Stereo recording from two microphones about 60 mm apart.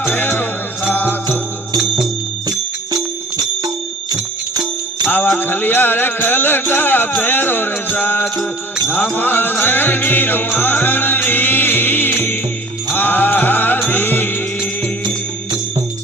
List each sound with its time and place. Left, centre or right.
0.1 s music: left
5.4 s music: left